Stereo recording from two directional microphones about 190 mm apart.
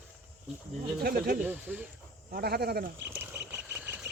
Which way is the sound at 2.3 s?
55° right (ahead or behind).